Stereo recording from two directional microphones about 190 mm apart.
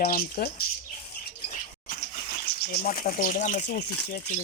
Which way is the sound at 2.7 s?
50° left (ahead or behind).